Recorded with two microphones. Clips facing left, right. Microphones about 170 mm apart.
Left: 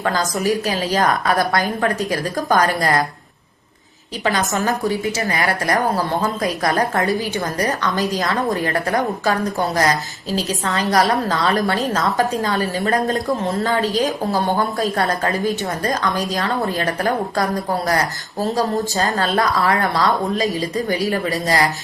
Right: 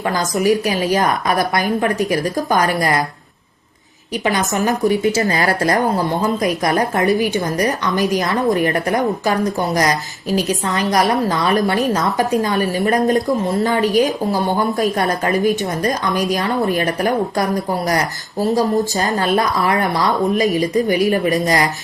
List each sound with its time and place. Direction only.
0.3 s a woman's voice: 20° right (ahead or behind)
4.3 s speech: 20° right (ahead or behind)
5.7 s a woman's voice: 20° right (ahead or behind)
10.3 s a woman's voice: 15° right (ahead or behind)
18.5 s a woman's voice: 15° right (ahead or behind)